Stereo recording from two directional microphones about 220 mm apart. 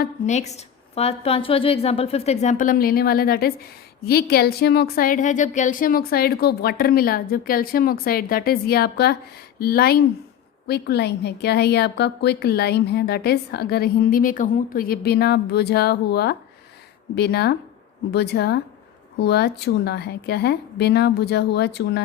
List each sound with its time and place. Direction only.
0.0 s a woman's voice: 30° left (ahead or behind); by 22.0 s 50° left (ahead or behind)